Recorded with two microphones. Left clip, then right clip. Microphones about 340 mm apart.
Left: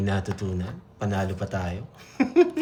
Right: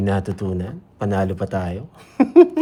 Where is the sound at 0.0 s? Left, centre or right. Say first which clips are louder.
Right 6 dB; centre.